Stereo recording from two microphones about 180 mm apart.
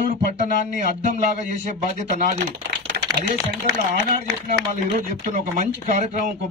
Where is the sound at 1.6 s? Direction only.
45° right (ahead or behind).